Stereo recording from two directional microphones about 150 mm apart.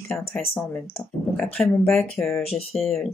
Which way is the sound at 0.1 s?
10° left (ahead or behind).